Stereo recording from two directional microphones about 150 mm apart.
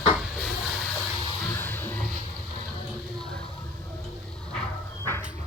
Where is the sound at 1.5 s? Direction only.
10° left (ahead or behind).